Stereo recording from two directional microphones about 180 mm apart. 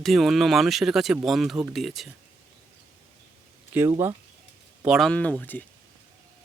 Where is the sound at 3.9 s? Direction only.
15° right (ahead or behind).